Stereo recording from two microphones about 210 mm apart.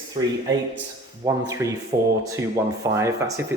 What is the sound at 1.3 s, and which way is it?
Speech, 15° right (ahead or behind).